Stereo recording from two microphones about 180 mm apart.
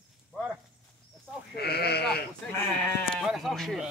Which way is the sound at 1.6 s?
60° left (ahead or behind).